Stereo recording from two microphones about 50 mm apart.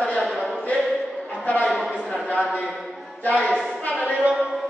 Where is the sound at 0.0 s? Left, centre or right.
Centre.